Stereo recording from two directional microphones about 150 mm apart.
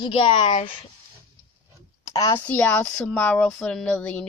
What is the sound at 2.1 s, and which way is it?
Speech, 20° left (ahead or behind).